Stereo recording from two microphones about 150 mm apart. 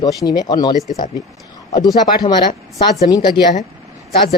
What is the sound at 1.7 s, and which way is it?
Speech, 25° left (ahead or behind).